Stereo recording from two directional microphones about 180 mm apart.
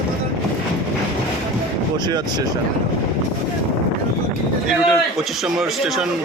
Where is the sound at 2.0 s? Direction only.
20° right (ahead or behind).